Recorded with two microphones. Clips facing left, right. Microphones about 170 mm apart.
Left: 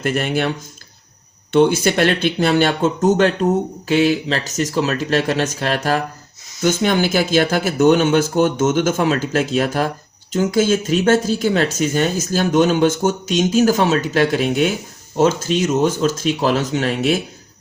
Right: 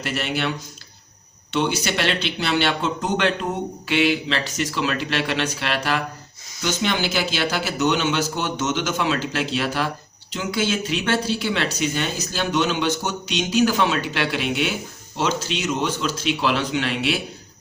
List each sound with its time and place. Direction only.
0.0 s speech: 50° left (ahead or behind)
1.5 s speech: 50° left (ahead or behind)